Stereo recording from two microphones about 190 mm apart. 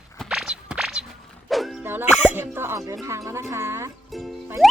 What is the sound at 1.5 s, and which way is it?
Dog, centre (ahead or behind).